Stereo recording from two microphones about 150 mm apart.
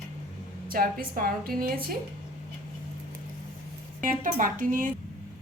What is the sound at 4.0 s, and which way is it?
Speech, 65° right (ahead or behind).